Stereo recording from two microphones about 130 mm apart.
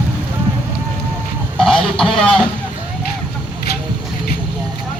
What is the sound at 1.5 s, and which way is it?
Radio, 5° left (ahead or behind).